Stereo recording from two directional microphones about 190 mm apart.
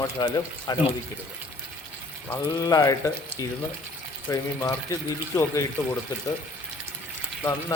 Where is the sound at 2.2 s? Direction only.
15° left (ahead or behind).